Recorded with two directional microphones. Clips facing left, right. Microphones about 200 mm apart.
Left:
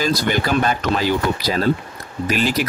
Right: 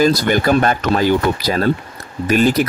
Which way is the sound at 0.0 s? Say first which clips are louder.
Right 6 dB; 50° right (ahead or behind).